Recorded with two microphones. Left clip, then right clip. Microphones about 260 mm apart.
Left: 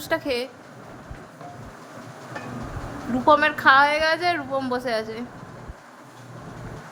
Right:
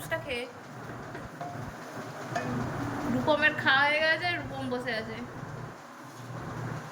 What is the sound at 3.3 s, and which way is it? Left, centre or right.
A woman's voice, centre.